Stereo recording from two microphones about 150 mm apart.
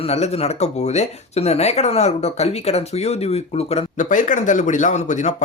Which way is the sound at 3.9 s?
60° left (ahead or behind).